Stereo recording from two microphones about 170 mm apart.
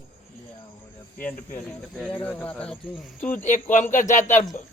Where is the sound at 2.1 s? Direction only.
10° left (ahead or behind).